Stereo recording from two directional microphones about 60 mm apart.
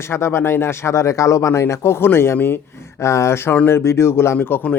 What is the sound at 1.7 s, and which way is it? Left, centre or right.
Speech, left.